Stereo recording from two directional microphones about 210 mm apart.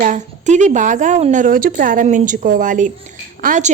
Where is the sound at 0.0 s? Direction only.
35° right (ahead or behind).